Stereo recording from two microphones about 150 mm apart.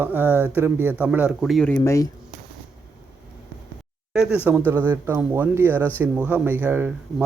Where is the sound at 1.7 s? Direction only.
20° left (ahead or behind).